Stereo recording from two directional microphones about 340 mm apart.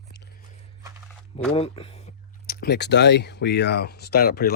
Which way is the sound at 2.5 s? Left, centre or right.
Left.